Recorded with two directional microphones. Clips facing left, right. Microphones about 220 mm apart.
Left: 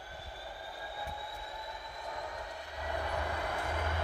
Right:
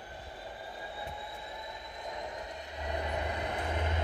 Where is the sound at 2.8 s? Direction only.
20° right (ahead or behind).